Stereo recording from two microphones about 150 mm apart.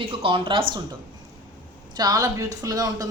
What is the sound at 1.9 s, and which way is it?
Speech, 25° right (ahead or behind).